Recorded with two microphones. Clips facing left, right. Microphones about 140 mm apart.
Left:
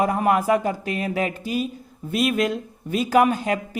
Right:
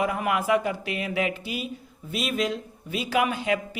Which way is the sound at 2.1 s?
50° left (ahead or behind).